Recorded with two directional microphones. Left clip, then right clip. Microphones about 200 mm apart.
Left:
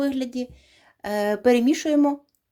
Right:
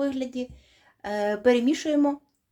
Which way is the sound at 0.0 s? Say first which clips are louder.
Left 2 dB; 30° left (ahead or behind).